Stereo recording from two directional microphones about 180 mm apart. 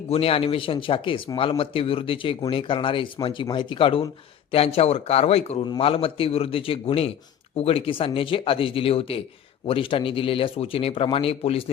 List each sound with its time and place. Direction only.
0.1 s speech: 30° left (ahead or behind)